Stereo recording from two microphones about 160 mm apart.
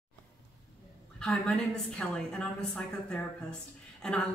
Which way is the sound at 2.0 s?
5° left (ahead or behind).